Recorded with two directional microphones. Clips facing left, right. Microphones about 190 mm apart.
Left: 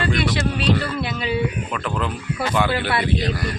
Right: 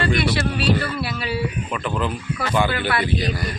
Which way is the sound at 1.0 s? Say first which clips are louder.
Left 2 dB; 20° left (ahead or behind).